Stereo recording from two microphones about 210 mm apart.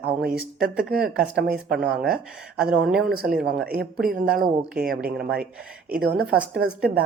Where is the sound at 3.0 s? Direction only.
45° right (ahead or behind).